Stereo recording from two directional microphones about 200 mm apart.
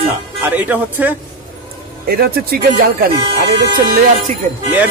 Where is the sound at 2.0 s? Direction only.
50° right (ahead or behind).